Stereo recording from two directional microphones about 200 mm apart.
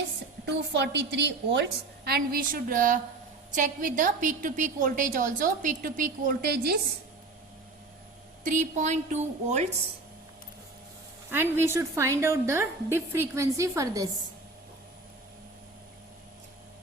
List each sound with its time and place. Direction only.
0.4 s a woman's voice: 60° right (ahead or behind)
8.4 s a woman's voice: 40° right (ahead or behind)
11.3 s a woman's voice: 10° right (ahead or behind)